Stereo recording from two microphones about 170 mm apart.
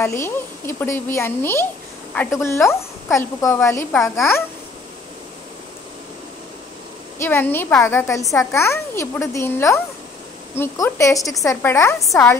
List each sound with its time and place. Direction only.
0.0 s a woman's voice: 15° left (ahead or behind)
7.2 s a woman's voice: 10° left (ahead or behind)
12.0 s a woman's voice: centre (ahead or behind)